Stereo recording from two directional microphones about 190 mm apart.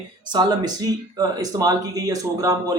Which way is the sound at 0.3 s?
20° right (ahead or behind).